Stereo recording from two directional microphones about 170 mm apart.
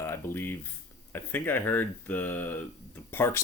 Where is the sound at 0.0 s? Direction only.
15° left (ahead or behind).